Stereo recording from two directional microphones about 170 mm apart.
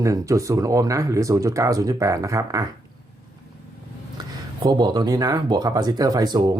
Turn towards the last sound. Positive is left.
turn(degrees=-25)  # may be behind; listen again after turning